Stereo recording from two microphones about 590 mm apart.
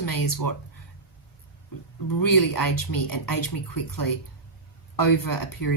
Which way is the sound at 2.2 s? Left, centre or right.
Left.